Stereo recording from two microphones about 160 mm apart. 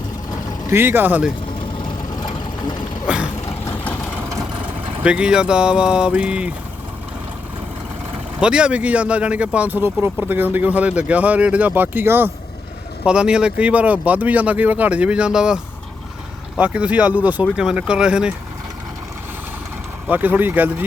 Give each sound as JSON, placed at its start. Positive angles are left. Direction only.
{"t": 0.7, "sound": "speech", "side_deg": -15}
{"t": 2.1, "sound": "sewing machine", "side_deg": 30}
{"t": 5.0, "sound": "speech", "side_deg": -5}
{"t": 8.4, "sound": "speech", "side_deg": -5}
{"t": 20.1, "sound": "speech", "side_deg": -10}